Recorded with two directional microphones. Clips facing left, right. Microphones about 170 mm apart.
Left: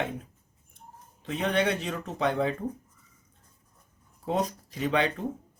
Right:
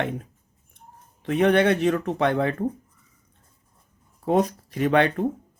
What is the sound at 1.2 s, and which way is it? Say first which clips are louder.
Speech: right 8 dB; 60° right (ahead or behind).